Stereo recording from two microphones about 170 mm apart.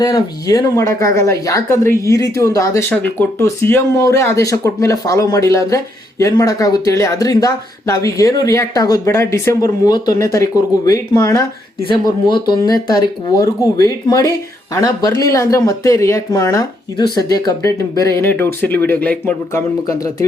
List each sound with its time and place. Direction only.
0.0 s speech: 25° left (ahead or behind)